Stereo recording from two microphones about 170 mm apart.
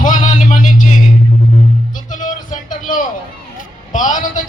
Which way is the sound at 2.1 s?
50° left (ahead or behind).